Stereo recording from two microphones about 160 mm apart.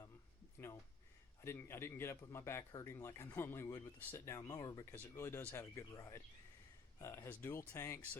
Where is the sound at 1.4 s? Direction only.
15° left (ahead or behind).